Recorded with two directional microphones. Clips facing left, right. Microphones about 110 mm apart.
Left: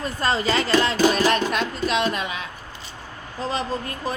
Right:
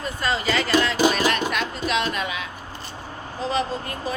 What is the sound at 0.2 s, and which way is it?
Speech, 35° left (ahead or behind).